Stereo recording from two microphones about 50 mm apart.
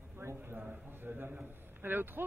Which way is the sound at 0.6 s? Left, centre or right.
Right.